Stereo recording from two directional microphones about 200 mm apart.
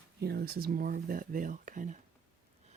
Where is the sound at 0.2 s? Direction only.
50° right (ahead or behind).